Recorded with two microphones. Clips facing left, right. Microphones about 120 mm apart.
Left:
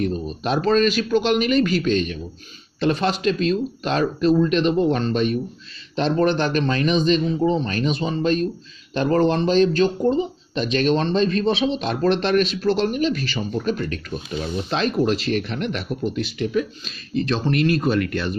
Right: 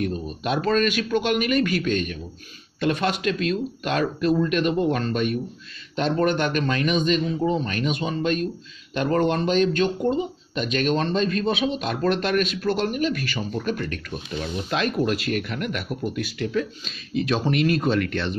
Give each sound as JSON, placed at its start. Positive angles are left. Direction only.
{"t": 0.0, "sound": "speech", "side_deg": 35}
{"t": 16.8, "sound": "speech", "side_deg": -5}